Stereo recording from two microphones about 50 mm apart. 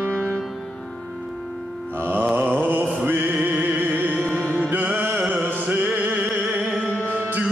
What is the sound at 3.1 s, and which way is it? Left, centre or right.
Music, right.